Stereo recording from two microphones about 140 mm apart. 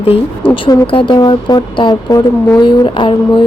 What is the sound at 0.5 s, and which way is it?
A woman's voice, 35° left (ahead or behind).